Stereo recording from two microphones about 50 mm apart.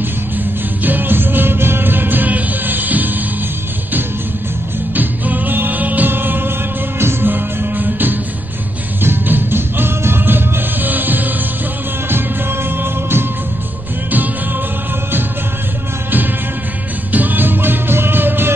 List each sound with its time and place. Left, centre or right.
0.8 s music: right
4.9 s music: right
7.0 s music: right
7.2 s music: right
12.1 s music: right
17.1 s music: right